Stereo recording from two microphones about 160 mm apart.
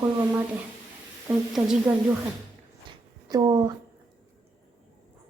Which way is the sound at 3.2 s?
25° right (ahead or behind).